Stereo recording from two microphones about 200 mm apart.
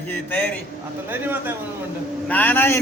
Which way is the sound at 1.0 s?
10° right (ahead or behind).